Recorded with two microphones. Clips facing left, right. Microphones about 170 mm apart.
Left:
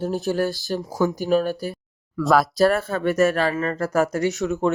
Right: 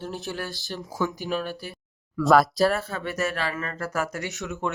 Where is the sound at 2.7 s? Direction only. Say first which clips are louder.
Left 7 dB; 50° left (ahead or behind).